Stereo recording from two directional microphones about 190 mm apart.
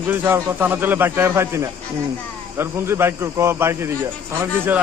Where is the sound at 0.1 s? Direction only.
10° right (ahead or behind).